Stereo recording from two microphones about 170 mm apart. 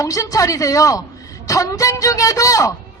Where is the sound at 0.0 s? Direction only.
20° left (ahead or behind).